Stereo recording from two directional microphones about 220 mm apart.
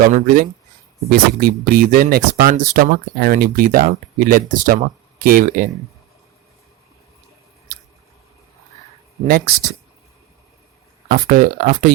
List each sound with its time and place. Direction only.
0.0 s speech: 35° right (ahead or behind)
9.2 s speech: 40° right (ahead or behind)
11.1 s speech: 35° right (ahead or behind)